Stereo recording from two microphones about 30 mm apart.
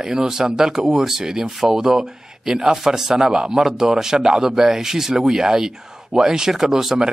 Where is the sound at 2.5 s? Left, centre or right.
Right.